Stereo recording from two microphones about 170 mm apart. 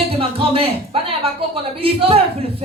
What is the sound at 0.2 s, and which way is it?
Speech, 35° right (ahead or behind).